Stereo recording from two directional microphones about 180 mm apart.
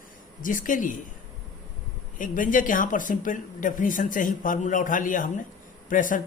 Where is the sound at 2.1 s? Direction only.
50° left (ahead or behind).